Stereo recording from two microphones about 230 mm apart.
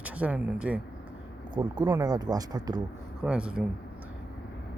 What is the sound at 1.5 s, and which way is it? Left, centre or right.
Speech, centre.